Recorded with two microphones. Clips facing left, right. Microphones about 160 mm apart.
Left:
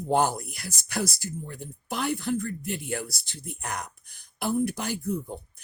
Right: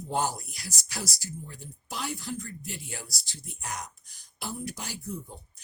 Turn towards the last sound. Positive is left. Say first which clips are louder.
# left 8 dB
turn(degrees=60)  # may be behind; listen again after turning